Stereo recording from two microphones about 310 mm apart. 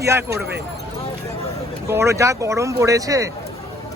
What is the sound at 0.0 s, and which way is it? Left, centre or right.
Speech, centre.